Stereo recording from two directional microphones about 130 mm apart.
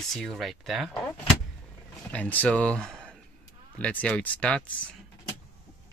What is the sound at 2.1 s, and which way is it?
Speech, 10° left (ahead or behind).